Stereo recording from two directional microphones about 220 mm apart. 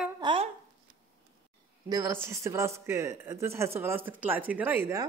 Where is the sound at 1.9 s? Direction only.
10° right (ahead or behind).